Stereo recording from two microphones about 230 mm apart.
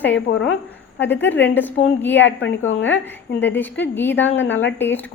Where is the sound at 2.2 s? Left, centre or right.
Left.